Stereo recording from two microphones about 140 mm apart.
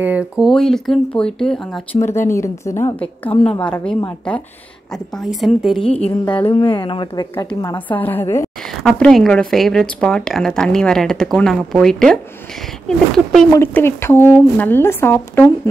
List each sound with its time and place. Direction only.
0.0 s a woman's voice: 10° right (ahead or behind)
2.0 s a woman's voice: 20° left (ahead or behind); by 5.8 s centre (ahead or behind)
6.2 s a woman's voice: 10° left (ahead or behind)
6.5 s speech: 35° left (ahead or behind)
7.7 s a woman's voice: 15° left (ahead or behind)
8.8 s a woman's voice: centre (ahead or behind)
13.5 s a woman's voice: 15° left (ahead or behind)